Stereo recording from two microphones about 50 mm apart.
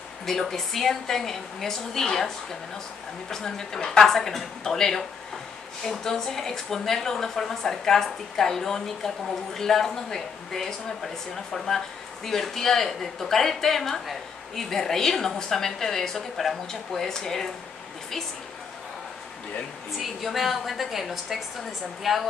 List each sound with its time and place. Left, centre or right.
0.3 s a woman's voice: centre
20.0 s a woman's voice: centre